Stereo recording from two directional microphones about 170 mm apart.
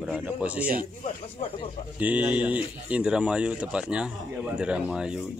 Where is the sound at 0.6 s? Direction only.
55° right (ahead or behind).